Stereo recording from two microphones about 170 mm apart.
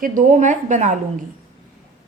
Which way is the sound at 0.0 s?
50° right (ahead or behind).